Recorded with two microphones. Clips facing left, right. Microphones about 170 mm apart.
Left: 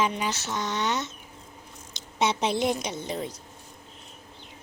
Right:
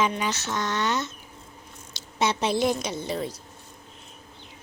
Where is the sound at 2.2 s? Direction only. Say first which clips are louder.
Right 1 dB; 15° left (ahead or behind).